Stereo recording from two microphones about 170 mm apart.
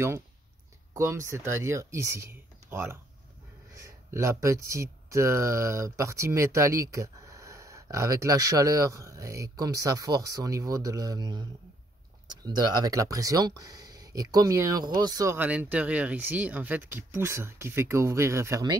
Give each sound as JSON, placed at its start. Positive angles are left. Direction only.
{"t": 0.9, "sound": "speech", "side_deg": -15}
{"t": 12.4, "sound": "speech", "side_deg": -25}